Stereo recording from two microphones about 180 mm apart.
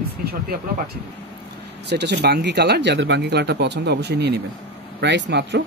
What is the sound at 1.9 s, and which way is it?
Speech, 70° right (ahead or behind).